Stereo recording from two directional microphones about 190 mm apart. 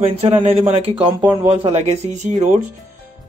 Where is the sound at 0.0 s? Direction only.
30° right (ahead or behind).